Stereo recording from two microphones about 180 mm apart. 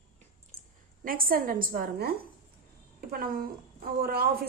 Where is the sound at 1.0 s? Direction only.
50° right (ahead or behind).